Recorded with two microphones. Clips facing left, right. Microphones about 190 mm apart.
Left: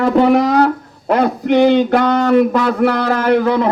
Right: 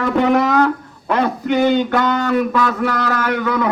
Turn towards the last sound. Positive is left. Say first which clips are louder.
# left 6 dB
turn(degrees=30)  # may be behind; listen again after turning